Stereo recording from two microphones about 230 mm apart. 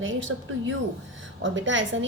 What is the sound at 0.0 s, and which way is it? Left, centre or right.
A woman's voice, right.